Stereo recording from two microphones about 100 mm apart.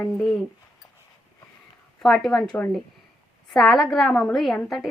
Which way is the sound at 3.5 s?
Centre (ahead or behind).